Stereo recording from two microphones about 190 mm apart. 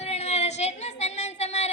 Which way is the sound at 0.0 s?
35° left (ahead or behind).